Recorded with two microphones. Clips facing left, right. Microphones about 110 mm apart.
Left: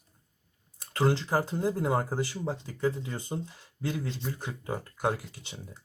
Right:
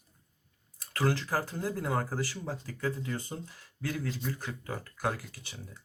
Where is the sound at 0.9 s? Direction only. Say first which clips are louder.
Left 4 dB; 20° left (ahead or behind).